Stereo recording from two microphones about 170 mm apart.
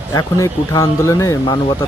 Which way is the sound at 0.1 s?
20° left (ahead or behind).